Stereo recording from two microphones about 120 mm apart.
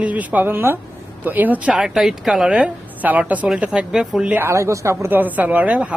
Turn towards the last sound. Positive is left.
turn(degrees=-10)  # may be behind; listen again after turning